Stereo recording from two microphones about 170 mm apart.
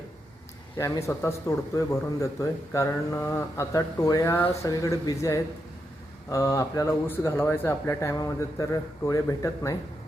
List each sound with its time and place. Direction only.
0.8 s speech: 15° left (ahead or behind)